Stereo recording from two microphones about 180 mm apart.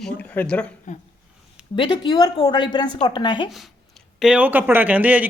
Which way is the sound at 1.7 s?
25° left (ahead or behind).